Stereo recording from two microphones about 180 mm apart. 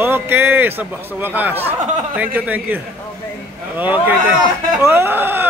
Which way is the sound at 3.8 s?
10° right (ahead or behind).